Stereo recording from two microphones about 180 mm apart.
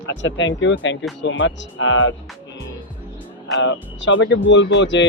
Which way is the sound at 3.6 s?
90° left.